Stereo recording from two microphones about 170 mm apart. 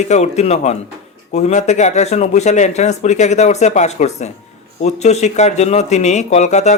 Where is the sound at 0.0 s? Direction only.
40° left (ahead or behind).